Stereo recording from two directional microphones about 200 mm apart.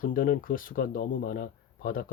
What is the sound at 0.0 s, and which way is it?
Speech, 45° left (ahead or behind).